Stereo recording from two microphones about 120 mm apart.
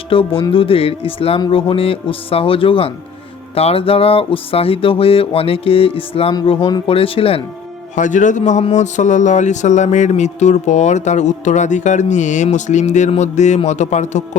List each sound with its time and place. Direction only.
0.1 s music: 50° left (ahead or behind)
7.9 s a man's voice: 90° left; by 14.3 s 75° left (ahead or behind)